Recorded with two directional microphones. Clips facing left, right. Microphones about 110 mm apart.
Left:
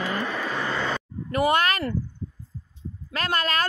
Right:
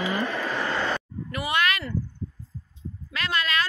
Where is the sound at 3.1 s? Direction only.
45° left (ahead or behind).